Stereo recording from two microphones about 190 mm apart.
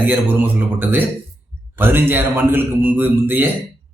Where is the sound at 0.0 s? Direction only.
10° right (ahead or behind).